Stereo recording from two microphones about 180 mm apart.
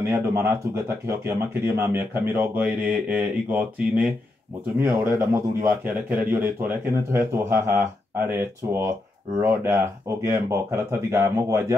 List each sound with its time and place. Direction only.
0.1 s speech: 15° right (ahead or behind)